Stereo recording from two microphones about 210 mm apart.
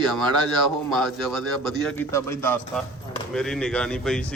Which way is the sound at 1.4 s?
5° left (ahead or behind).